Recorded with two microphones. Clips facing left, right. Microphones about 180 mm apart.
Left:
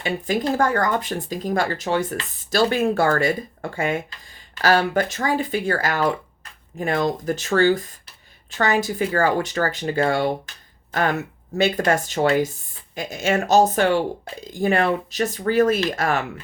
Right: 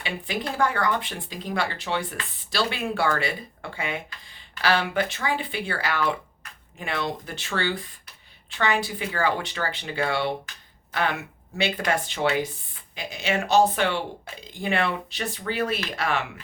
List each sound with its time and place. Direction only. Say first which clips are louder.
0.0 s speech: left 7 dB; 45° left (ahead or behind)